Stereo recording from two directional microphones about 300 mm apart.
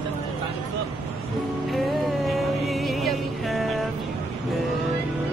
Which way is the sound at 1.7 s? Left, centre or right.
Centre.